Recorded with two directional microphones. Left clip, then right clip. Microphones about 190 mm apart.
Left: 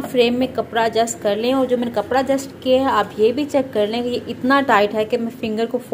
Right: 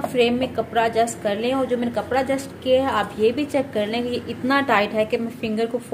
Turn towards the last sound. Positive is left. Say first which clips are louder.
# left 2 dB
turn(degrees=25)  # may be behind; listen again after turning